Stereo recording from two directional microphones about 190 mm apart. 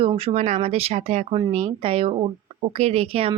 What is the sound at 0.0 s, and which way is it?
Speech, 30° right (ahead or behind).